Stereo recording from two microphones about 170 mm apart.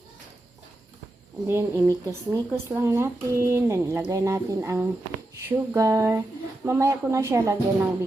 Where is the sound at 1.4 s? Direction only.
15° right (ahead or behind).